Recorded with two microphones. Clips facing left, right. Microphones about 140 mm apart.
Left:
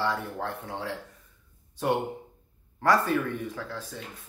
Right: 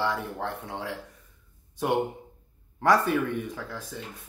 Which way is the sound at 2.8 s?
15° right (ahead or behind).